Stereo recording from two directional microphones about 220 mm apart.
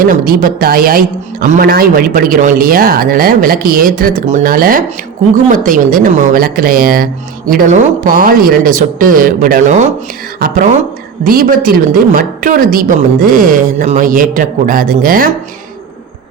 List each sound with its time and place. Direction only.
0.0 s speech: 40° right (ahead or behind)